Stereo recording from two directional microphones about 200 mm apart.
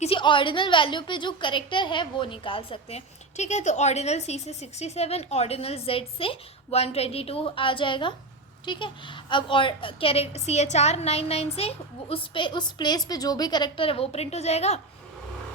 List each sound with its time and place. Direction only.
0.0 s a woman's voice: 25° left (ahead or behind)